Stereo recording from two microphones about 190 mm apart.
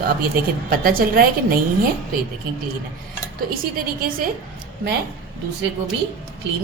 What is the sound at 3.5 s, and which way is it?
Speech, 50° right (ahead or behind).